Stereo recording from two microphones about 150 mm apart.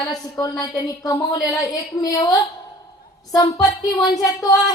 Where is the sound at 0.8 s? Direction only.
25° left (ahead or behind).